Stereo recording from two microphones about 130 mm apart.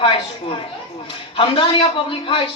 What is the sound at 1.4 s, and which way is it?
A man's voice, 40° left (ahead or behind).